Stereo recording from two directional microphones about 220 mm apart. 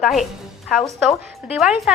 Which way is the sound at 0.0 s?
Centre (ahead or behind).